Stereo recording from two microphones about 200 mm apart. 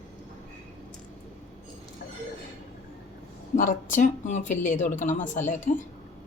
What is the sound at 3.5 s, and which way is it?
Speech, 40° left (ahead or behind).